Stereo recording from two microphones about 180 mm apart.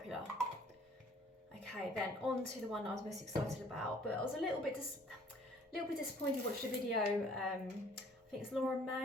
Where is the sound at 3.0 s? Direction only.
40° right (ahead or behind).